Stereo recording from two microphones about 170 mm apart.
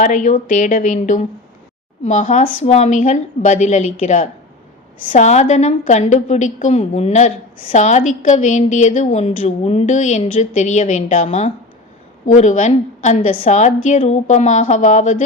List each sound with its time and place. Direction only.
0.0 s a woman's voice: 50° left (ahead or behind)